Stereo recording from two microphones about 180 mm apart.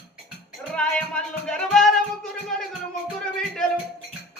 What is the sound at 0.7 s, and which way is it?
Music, 5° left (ahead or behind).